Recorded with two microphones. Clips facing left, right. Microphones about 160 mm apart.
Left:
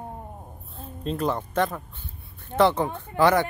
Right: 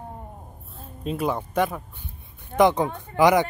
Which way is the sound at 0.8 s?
5° right (ahead or behind).